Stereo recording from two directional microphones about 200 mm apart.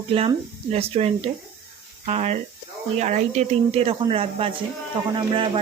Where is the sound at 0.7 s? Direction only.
30° right (ahead or behind).